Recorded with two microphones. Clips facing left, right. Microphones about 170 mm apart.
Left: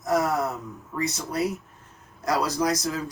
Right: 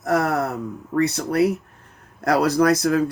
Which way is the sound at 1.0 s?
60° right (ahead or behind).